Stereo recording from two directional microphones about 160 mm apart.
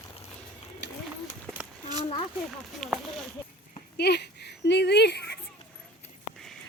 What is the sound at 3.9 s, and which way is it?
Speech, 90° left.